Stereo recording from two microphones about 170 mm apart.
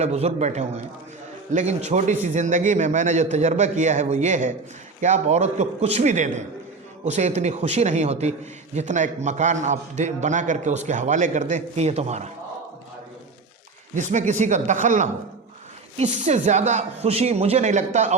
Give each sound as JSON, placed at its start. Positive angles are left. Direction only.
{"t": 0.0, "sound": "a man's voice", "side_deg": -40}
{"t": 13.9, "sound": "a man's voice", "side_deg": -45}